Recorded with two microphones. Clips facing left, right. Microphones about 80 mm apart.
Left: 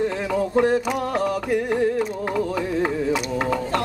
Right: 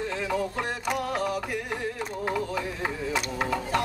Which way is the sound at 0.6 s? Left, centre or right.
Left.